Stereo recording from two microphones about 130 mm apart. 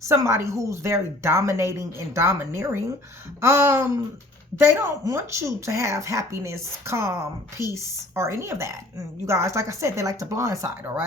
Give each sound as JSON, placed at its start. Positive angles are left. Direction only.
{"t": 0.0, "sound": "a woman's voice", "side_deg": -20}